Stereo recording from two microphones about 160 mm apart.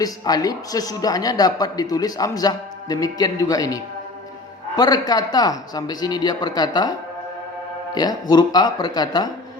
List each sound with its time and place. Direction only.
0.0 s a woman's voice: 25° left (ahead or behind)
4.8 s a woman's voice: 25° left (ahead or behind)
7.9 s a woman's voice: 25° left (ahead or behind)